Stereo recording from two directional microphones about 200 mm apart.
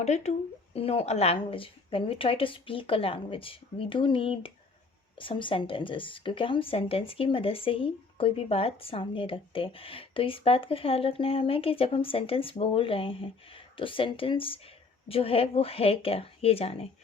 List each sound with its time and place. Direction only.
0.0 s a woman's voice: 35° left (ahead or behind)